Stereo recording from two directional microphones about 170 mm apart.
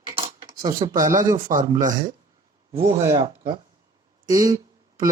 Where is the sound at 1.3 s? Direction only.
50° right (ahead or behind).